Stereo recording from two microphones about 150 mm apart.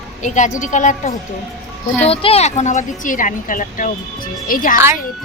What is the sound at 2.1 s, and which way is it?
A woman's voice, 40° left (ahead or behind).